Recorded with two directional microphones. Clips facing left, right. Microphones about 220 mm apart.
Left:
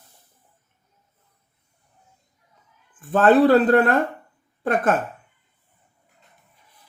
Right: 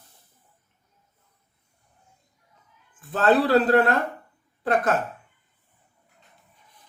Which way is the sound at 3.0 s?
50° left (ahead or behind).